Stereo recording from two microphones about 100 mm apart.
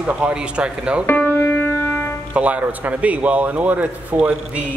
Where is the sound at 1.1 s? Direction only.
20° left (ahead or behind).